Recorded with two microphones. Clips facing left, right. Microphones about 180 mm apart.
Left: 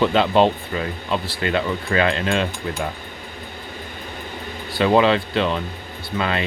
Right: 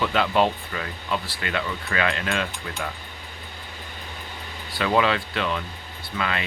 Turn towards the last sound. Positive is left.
turn(degrees=30)  # may be behind; listen again after turning